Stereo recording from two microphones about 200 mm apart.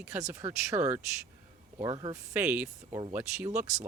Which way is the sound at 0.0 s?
15° right (ahead or behind).